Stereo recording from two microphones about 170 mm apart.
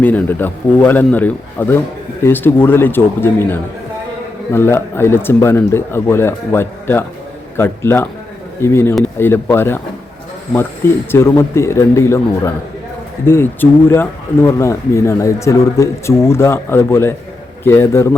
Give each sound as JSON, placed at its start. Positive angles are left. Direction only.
{"t": 0.0, "sound": "speech", "side_deg": 10}